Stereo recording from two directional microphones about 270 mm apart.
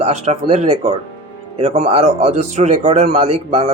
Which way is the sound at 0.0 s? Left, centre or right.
Right.